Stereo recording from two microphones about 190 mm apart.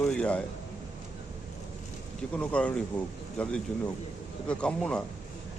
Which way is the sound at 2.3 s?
5° left (ahead or behind).